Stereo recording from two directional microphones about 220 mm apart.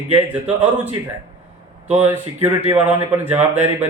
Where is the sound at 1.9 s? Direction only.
10° right (ahead or behind).